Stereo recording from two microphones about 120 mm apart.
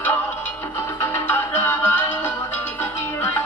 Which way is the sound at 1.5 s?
20° left (ahead or behind).